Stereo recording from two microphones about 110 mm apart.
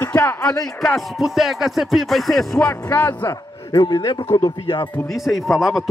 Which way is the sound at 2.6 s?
20° left (ahead or behind).